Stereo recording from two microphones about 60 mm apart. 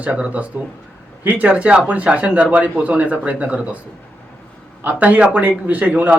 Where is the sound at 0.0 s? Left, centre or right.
Right.